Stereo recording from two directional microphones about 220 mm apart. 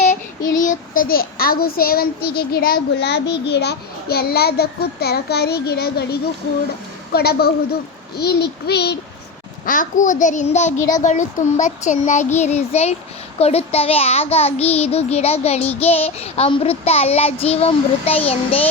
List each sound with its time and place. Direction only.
0.6 s a child's voice: 35° left (ahead or behind)
9.6 s a child's voice: 35° left (ahead or behind)